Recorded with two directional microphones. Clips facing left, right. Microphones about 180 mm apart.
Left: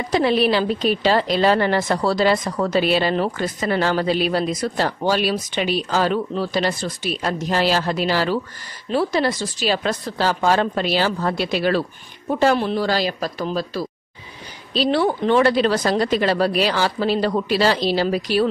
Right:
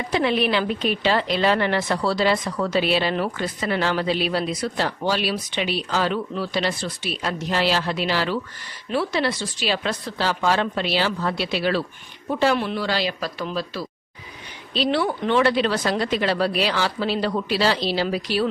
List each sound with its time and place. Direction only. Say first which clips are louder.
0.1 s a woman's voice: left 4 dB; 35° left (ahead or behind)